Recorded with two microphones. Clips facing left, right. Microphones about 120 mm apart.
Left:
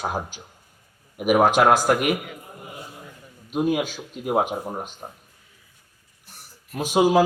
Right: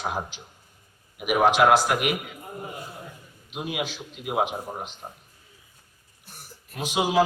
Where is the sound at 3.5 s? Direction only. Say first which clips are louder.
Left 8 dB; 45° left (ahead or behind).